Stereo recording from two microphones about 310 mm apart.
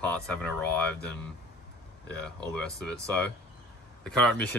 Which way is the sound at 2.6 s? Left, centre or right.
Centre.